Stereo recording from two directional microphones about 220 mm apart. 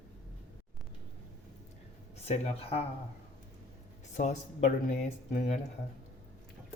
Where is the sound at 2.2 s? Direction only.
30° left (ahead or behind).